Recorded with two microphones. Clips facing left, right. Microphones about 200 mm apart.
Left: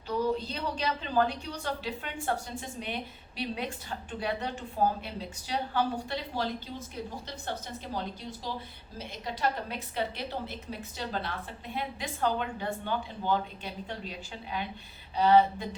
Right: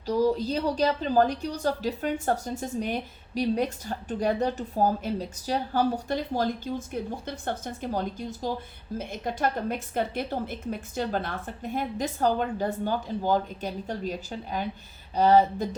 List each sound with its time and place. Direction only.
0.1 s a woman's voice: 35° right (ahead or behind)